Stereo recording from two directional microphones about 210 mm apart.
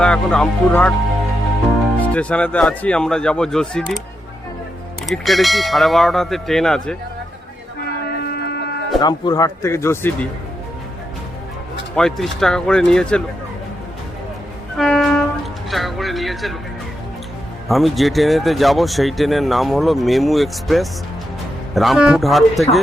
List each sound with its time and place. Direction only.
0.0 s speech: 5° left (ahead or behind)
2.0 s speech: 5° left (ahead or behind)
5.0 s speech: centre (ahead or behind)
8.1 s a sound: 50° left (ahead or behind)
9.0 s speech: 20° left (ahead or behind)
11.9 s speech: centre (ahead or behind)
14.8 s train: centre (ahead or behind)
15.7 s music: centre (ahead or behind)
17.7 s speech: centre (ahead or behind)